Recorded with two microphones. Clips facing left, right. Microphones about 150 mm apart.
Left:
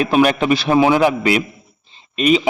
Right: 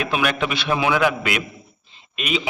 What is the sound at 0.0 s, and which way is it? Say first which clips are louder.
A man's voice: left 8 dB; 35° left (ahead or behind).